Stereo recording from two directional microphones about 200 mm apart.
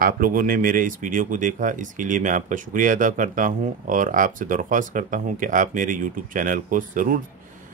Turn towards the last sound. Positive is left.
turn(degrees=-40)  # may be behind; listen again after turning